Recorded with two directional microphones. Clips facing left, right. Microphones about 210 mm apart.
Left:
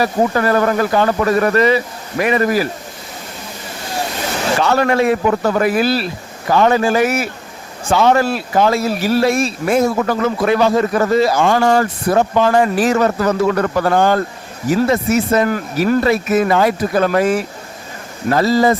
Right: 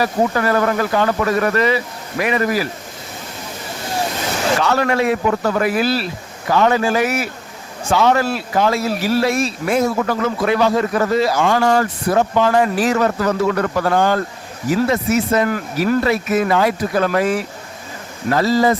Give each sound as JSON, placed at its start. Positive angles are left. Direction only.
{"t": 0.0, "sound": "speech", "side_deg": 35}
{"t": 4.6, "sound": "speech", "side_deg": 35}
{"t": 6.5, "sound": "speech", "side_deg": 35}
{"t": 7.9, "sound": "speech", "side_deg": 30}
{"t": 9.0, "sound": "speech", "side_deg": 50}